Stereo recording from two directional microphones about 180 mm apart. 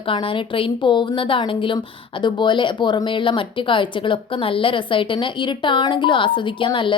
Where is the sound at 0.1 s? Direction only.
30° left (ahead or behind).